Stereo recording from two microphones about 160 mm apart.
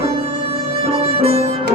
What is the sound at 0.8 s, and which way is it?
Music, 40° right (ahead or behind).